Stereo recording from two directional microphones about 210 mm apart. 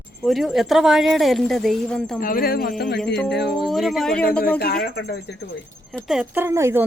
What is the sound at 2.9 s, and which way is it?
Speech, 5° left (ahead or behind).